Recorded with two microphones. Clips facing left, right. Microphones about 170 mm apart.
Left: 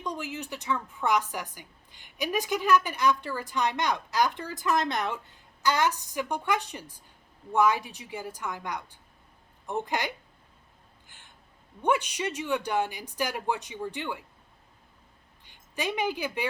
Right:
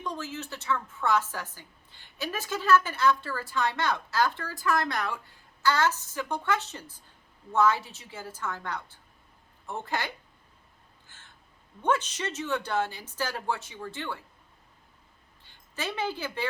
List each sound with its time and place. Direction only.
0.0 s speech: 15° left (ahead or behind)
11.0 s crow: 15° left (ahead or behind)
11.8 s speech: 15° left (ahead or behind)
15.4 s a woman's voice: 15° left (ahead or behind)